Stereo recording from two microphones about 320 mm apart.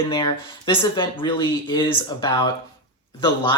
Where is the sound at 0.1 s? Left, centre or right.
Centre.